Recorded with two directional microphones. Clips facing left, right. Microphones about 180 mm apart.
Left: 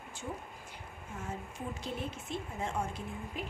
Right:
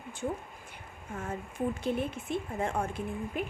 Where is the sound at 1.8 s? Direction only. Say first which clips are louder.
Right 7 dB; 55° right (ahead or behind).